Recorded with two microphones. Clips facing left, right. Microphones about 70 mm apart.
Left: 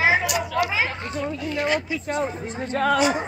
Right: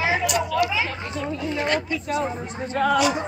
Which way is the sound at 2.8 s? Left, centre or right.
Left.